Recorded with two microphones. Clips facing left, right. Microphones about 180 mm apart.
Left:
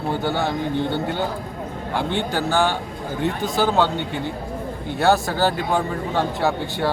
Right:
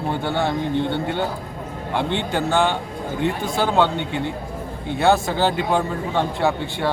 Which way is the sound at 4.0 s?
65° right (ahead or behind).